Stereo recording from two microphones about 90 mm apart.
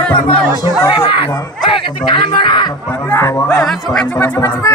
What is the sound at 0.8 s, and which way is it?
Speech, 75° left (ahead or behind).